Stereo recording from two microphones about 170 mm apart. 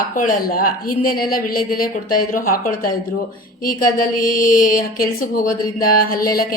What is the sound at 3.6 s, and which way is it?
Mantra, 55° left (ahead or behind).